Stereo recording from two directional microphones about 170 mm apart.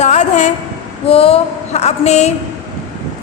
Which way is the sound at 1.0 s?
35° left (ahead or behind).